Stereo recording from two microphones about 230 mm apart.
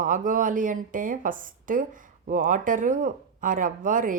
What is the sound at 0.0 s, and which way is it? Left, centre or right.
Speech, right.